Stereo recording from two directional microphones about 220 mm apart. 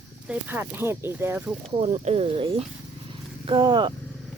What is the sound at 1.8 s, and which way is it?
Speech, 30° right (ahead or behind).